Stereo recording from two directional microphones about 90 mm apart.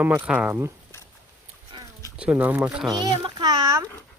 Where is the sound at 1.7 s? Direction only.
60° right (ahead or behind).